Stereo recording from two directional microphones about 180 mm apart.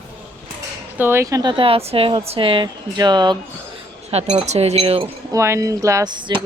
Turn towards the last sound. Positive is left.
turn(degrees=-25)  # may be behind; listen again after turning